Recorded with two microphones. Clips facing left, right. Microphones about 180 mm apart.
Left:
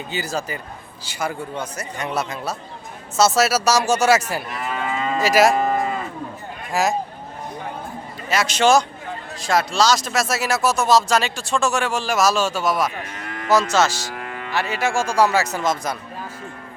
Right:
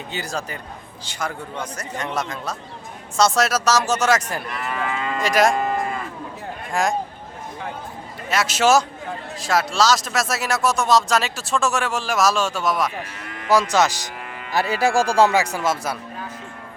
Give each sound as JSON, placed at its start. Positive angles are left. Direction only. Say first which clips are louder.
{"t": 0.1, "sound": "speech", "louder": "left 3 dB", "side_deg": 5}
{"t": 6.8, "sound": "speech", "louder": "left 1 dB", "side_deg": 5}
{"t": 8.3, "sound": "speech", "louder": "left 1 dB", "side_deg": 0}
{"t": 13.2, "sound": "cattle", "louder": "left 4 dB", "side_deg": 45}
{"t": 13.5, "sound": "speech", "louder": "even", "side_deg": -15}
{"t": 14.5, "sound": "speech", "louder": "right 3 dB", "side_deg": -35}